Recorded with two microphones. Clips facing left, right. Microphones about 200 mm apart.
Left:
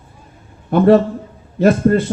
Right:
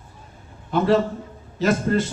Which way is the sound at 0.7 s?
55° left (ahead or behind).